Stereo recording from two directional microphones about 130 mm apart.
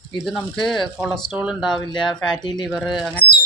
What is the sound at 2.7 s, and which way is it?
Speech, centre (ahead or behind).